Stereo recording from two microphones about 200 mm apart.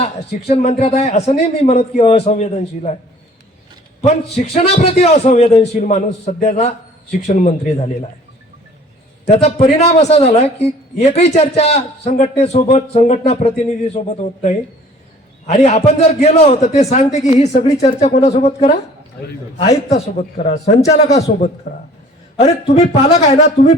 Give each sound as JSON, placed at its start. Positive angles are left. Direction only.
{"t": 0.4, "sound": "a woman's voice", "side_deg": 30}
{"t": 4.5, "sound": "a woman's voice", "side_deg": 30}
{"t": 9.2, "sound": "a woman's voice", "side_deg": 35}